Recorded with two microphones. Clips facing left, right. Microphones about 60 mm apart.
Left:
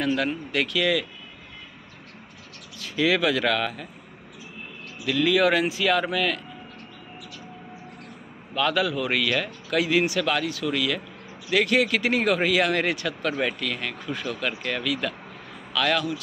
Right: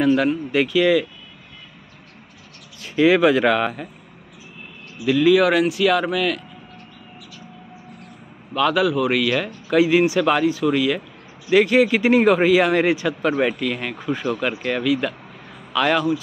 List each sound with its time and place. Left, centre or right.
0.0 s a man's voice: centre
2.8 s speech: right
5.0 s a man's voice: centre
8.5 s a man's voice: centre; by 16.2 s right